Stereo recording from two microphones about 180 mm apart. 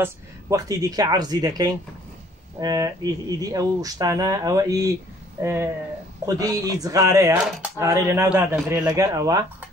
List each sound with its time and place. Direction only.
0.0 s a man's voice: 20° right (ahead or behind)